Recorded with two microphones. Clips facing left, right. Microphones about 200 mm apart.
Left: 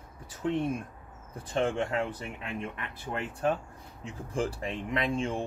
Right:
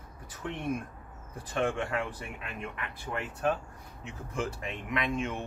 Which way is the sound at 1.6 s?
25° left (ahead or behind).